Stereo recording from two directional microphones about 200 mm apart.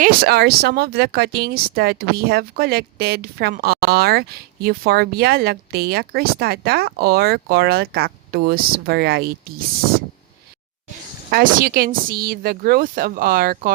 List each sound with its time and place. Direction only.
0.0 s speech: 50° right (ahead or behind)
11.3 s speech: 45° right (ahead or behind)